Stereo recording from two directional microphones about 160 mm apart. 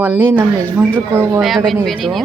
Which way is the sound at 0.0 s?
15° right (ahead or behind).